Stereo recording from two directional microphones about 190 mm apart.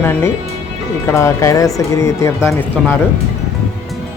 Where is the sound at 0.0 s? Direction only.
10° left (ahead or behind).